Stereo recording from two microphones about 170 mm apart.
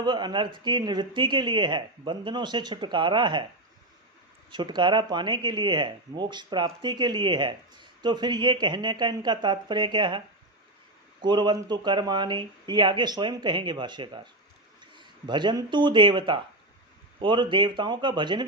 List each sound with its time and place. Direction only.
0.0 s speech: 25° right (ahead or behind)
4.5 s speech: 25° right (ahead or behind)